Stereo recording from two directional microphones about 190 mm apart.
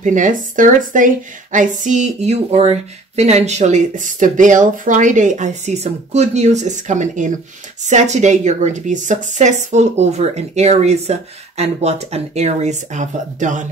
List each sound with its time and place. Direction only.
0.0 s a woman's voice: 40° right (ahead or behind)